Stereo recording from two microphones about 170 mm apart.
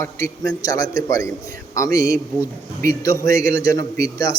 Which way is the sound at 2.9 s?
20° left (ahead or behind).